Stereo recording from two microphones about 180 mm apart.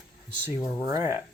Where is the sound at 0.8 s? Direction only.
15° right (ahead or behind).